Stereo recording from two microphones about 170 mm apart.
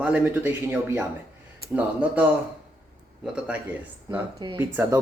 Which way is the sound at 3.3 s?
5° right (ahead or behind).